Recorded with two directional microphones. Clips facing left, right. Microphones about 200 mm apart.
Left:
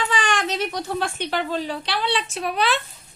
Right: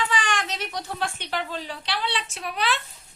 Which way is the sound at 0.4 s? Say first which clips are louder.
Left 7 dB; 35° left (ahead or behind).